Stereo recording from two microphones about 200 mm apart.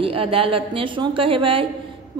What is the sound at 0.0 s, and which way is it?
A woman's voice, 25° right (ahead or behind).